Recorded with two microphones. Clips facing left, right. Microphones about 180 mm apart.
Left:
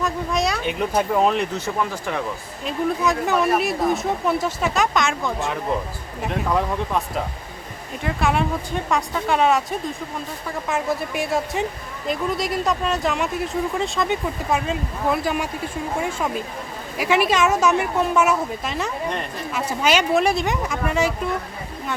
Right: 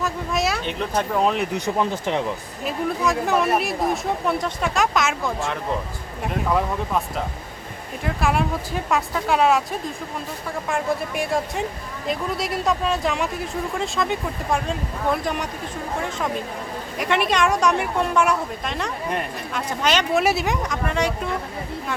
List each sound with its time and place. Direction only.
0.0 s speech: centre (ahead or behind)
1.5 s speech: 20° right (ahead or behind)
2.6 s speech: centre (ahead or behind)
8.0 s speech: centre (ahead or behind)
17.0 s speech: 5° left (ahead or behind)
20.2 s speech: 5° right (ahead or behind)